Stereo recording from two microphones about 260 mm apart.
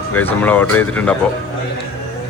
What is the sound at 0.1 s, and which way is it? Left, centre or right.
Speech, centre.